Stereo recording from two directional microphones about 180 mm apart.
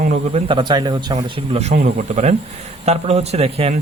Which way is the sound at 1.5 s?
35° right (ahead or behind).